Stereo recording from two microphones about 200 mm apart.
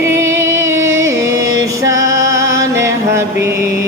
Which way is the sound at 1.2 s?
15° right (ahead or behind).